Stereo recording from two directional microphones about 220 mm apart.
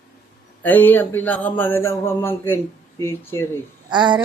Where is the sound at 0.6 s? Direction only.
10° left (ahead or behind).